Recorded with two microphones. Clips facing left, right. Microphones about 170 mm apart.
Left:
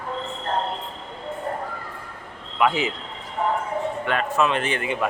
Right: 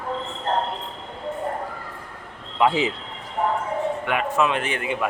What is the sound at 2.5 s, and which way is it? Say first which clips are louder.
Speech: right 1 dB; 25° right (ahead or behind).